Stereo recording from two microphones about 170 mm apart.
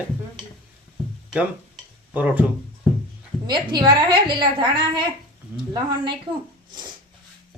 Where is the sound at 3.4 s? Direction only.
25° right (ahead or behind).